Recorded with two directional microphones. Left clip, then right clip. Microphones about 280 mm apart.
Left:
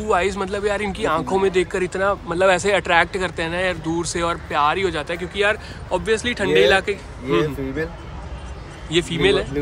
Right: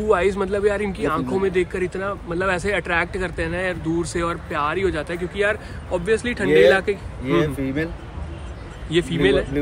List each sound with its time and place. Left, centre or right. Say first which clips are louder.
0.1 s speech: even; centre
8.9 s speech: left 1 dB; centre